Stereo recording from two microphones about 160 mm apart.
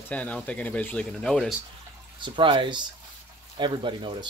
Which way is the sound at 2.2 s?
30° right (ahead or behind).